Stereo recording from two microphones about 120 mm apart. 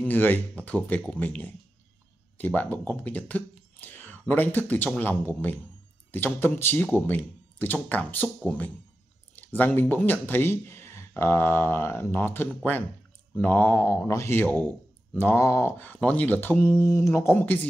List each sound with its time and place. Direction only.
0.0 s speech: 15° left (ahead or behind)
9.3 s a sound: 15° left (ahead or behind)
9.8 s speech: 15° left (ahead or behind)